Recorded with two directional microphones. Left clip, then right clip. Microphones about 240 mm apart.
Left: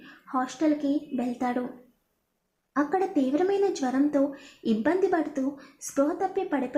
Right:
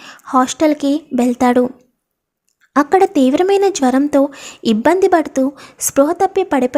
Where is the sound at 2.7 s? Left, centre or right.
Right.